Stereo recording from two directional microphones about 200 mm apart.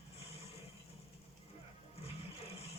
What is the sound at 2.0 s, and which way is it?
Music, 30° left (ahead or behind).